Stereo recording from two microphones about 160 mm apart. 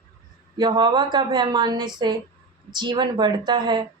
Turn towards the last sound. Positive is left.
turn(degrees=-30)  # may be behind; listen again after turning